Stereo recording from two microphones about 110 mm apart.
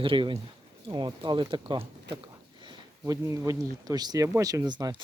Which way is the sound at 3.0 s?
30° right (ahead or behind).